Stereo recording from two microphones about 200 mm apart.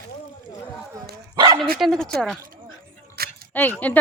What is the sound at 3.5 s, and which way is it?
Speech, 10° left (ahead or behind).